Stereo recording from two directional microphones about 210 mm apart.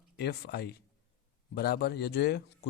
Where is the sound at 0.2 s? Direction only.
50° left (ahead or behind).